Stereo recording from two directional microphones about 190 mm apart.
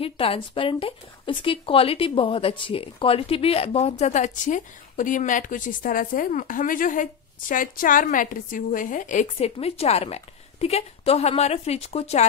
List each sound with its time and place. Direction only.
0.0 s a woman's voice: 30° left (ahead or behind)